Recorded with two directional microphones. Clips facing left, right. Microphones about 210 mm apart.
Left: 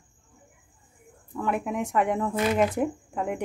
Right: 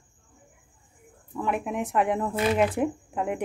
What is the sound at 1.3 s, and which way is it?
Speech, 5° right (ahead or behind).